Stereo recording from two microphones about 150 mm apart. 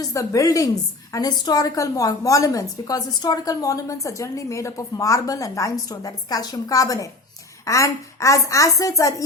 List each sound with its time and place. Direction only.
0.0 s a woman's voice: 20° left (ahead or behind)